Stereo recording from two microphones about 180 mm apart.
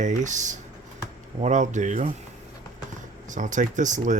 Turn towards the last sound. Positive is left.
turn(degrees=-45)  # may be behind; listen again after turning